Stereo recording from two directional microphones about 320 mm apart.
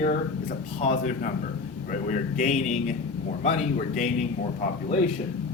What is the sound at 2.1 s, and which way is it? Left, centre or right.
Speech, left.